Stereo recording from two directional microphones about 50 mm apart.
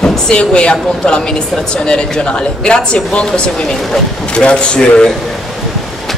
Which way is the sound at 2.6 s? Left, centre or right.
Centre.